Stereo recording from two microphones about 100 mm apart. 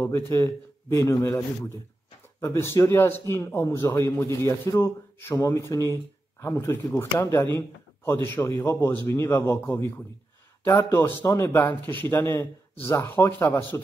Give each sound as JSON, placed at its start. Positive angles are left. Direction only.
{"t": 0.0, "sound": "a man's voice", "side_deg": 30}
{"t": 2.4, "sound": "a man's voice", "side_deg": 25}